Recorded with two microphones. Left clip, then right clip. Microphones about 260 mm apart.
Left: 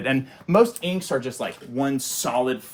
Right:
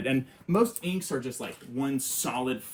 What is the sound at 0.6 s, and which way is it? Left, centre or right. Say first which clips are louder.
Speech: left 7 dB; centre.